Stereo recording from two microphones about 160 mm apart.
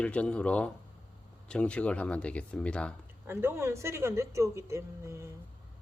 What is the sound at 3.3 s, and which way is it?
Speech, 15° right (ahead or behind).